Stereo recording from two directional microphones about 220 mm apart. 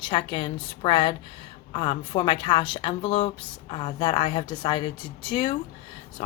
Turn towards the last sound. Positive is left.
turn(degrees=25)  # may be behind; listen again after turning